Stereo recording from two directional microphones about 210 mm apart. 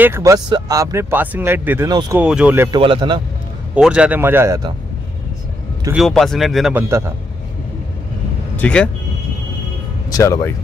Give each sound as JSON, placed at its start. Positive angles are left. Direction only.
{"t": 0.0, "sound": "speech", "side_deg": -15}
{"t": 2.2, "sound": "speech", "side_deg": -5}
{"t": 2.8, "sound": "speech", "side_deg": -20}
{"t": 3.7, "sound": "speech", "side_deg": -5}
{"t": 5.9, "sound": "speech", "side_deg": 0}
{"t": 8.5, "sound": "speech", "side_deg": 5}
{"t": 10.0, "sound": "speech", "side_deg": 15}